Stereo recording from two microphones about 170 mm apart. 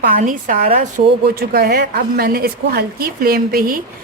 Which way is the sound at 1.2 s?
65° right (ahead or behind).